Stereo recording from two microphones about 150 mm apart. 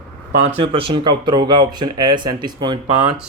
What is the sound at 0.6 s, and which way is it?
Speech, 35° right (ahead or behind).